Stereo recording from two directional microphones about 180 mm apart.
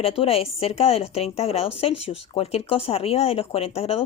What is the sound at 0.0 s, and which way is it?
Speech, 30° left (ahead or behind).